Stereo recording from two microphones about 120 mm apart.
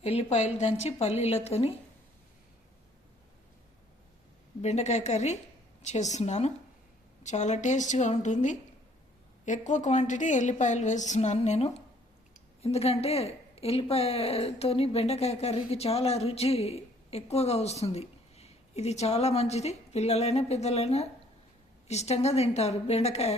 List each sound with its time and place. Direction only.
0.0 s a woman's voice: 60° left (ahead or behind)
4.6 s a woman's voice: 65° left (ahead or behind)